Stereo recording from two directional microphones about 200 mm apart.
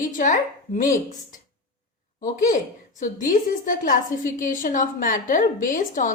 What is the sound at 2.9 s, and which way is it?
A woman's voice, 40° left (ahead or behind).